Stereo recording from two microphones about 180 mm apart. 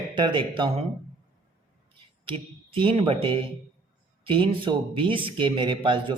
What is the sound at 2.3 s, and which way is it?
Speech, 30° right (ahead or behind).